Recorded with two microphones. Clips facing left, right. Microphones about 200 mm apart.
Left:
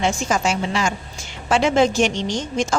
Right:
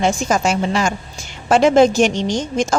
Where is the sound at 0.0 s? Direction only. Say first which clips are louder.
Right 3 dB; 40° right (ahead or behind).